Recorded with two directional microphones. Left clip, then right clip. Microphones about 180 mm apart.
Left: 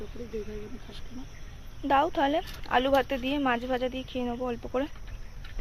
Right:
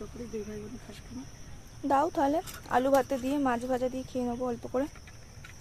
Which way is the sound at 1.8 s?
10° right (ahead or behind).